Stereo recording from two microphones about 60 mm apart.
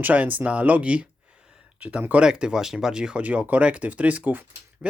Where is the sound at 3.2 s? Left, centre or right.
Right.